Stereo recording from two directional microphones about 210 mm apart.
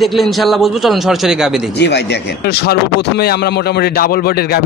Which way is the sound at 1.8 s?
55° left (ahead or behind).